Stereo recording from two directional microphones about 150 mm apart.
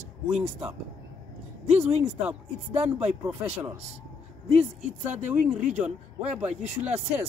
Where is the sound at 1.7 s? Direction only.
10° right (ahead or behind).